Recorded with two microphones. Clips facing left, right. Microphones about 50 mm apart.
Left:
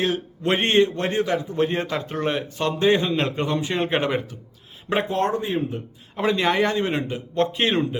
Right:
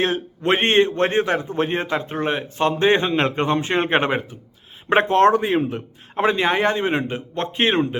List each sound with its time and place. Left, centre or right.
0.0 s a man's voice: right
5.0 s speech: right
6.1 s a man's voice: right